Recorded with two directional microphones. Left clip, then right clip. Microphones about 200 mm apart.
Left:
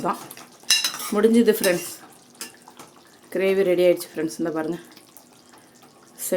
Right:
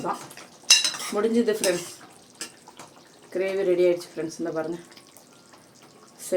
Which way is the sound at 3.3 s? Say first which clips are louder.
Left 4 dB; 45° left (ahead or behind).